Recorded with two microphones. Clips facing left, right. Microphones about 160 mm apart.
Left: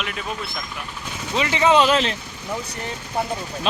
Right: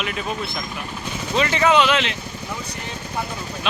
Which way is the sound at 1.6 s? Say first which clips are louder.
Left 2 dB; 35° left (ahead or behind).